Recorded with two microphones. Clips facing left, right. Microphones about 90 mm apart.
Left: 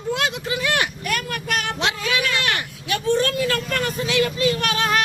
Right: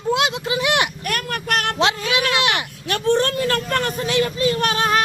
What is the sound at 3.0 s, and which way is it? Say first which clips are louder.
Vehicle: right 2 dB; 60° right (ahead or behind).